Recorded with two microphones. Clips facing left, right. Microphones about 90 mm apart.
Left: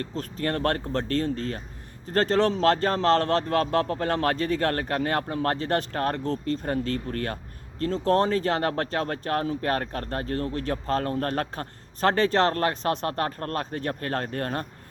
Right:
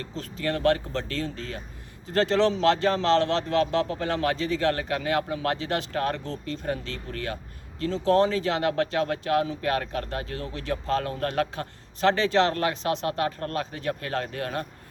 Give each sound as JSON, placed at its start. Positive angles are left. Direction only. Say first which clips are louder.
{"t": 0.0, "sound": "speech", "louder": "left 2 dB", "side_deg": 45}